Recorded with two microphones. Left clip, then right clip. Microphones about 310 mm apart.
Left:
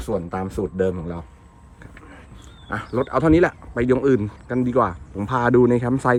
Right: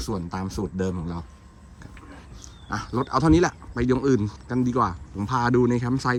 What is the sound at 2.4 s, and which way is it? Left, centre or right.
Speech, centre.